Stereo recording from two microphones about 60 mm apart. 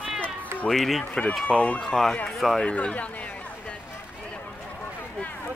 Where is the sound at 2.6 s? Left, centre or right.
Centre.